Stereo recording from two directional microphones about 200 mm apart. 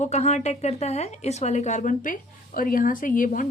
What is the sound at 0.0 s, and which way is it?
A woman's voice, 35° left (ahead or behind).